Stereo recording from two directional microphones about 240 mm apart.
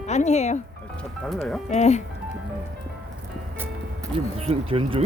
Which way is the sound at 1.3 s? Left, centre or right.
Centre.